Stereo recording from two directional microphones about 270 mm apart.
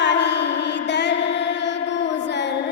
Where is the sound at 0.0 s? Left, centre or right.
Left.